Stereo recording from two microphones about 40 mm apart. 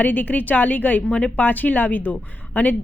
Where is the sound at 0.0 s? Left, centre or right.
Left.